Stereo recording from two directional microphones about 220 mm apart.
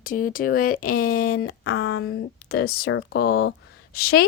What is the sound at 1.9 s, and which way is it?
Speech, 65° left (ahead or behind).